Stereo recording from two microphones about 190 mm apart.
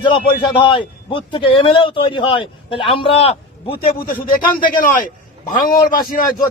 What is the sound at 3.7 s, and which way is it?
A man's voice, 50° left (ahead or behind).